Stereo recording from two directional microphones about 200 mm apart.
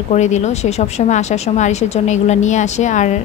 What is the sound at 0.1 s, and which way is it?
Speech, 35° left (ahead or behind).